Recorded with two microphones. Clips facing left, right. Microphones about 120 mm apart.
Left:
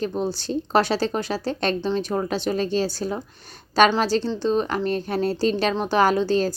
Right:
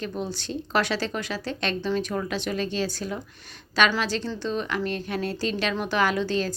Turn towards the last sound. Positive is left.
turn(degrees=35)  # may be behind; listen again after turning